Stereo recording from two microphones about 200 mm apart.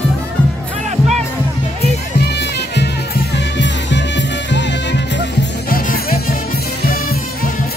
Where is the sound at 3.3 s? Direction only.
60° left (ahead or behind).